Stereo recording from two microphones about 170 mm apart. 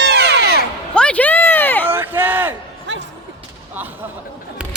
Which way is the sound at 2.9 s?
90° right.